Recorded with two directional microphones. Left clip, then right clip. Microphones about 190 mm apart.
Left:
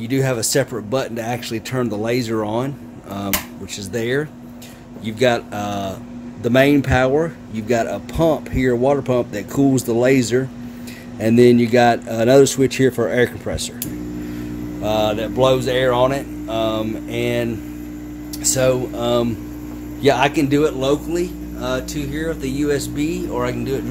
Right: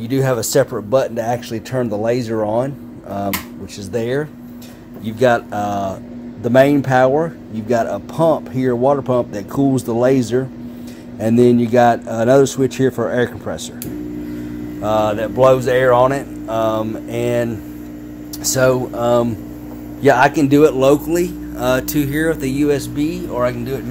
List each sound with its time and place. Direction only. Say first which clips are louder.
0.0 s speech: right 2 dB; centre (ahead or behind)
14.8 s speech: right 2 dB; centre (ahead or behind)
20.4 s speech: right 6 dB; 25° right (ahead or behind)
20.8 s speech: right 6 dB; 45° right (ahead or behind)
22.6 s speech: even; 10° right (ahead or behind)